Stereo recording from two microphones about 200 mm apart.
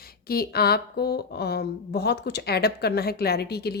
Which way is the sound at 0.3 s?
50° left (ahead or behind).